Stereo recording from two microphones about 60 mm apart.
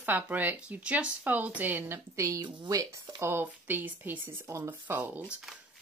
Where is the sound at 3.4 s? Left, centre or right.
Right.